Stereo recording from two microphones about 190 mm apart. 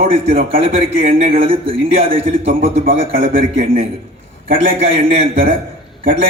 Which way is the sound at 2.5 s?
45° right (ahead or behind).